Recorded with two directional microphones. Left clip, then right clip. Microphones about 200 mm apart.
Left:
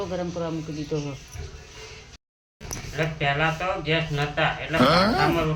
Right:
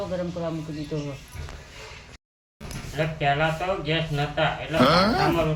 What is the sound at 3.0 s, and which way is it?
A man's voice, centre (ahead or behind).